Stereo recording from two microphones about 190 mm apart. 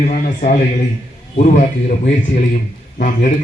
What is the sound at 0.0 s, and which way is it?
A man's voice, 40° left (ahead or behind).